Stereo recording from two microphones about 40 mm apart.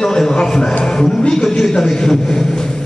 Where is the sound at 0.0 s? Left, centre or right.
Centre.